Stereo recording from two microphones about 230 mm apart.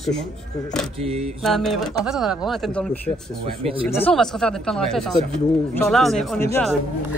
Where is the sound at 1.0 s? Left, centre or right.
Right.